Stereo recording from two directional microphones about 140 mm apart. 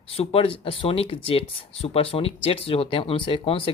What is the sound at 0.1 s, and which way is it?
Speech, 45° left (ahead or behind).